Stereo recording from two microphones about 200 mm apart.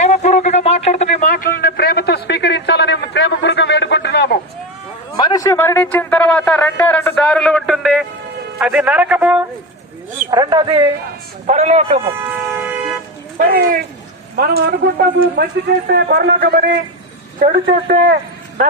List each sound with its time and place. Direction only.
0.0 s a sound: 35° left (ahead or behind); by 4.4 s 55° left (ahead or behind)
5.1 s a man's voice: 20° left (ahead or behind); by 9.4 s 5° right (ahead or behind)
10.3 s speech: 20° right (ahead or behind)
11.4 s a man's voice: 35° right (ahead or behind)
12.5 s toot: 10° right (ahead or behind)
13.3 s a man's voice: 45° right (ahead or behind)